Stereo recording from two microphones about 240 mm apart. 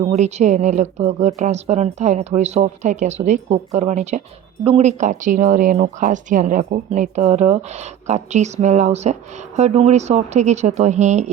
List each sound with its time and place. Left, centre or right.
0.0 s speech: right